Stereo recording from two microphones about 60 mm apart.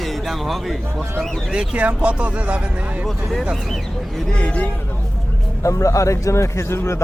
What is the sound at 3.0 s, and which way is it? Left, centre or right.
Speech, centre.